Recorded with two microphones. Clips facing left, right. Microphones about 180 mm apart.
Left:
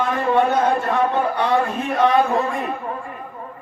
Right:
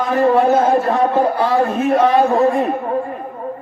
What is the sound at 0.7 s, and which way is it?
Speech, 35° right (ahead or behind).